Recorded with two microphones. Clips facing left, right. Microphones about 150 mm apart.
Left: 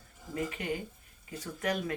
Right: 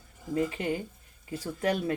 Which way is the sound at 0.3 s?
30° right (ahead or behind).